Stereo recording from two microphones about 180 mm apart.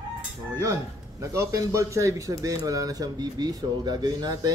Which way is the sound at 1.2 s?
15° right (ahead or behind).